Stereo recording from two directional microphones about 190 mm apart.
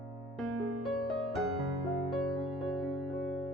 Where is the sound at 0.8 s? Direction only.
Centre (ahead or behind).